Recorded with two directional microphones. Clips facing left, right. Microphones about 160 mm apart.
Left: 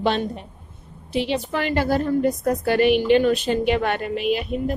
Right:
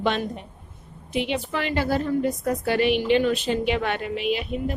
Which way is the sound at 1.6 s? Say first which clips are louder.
Left 3 dB; 45° left (ahead or behind).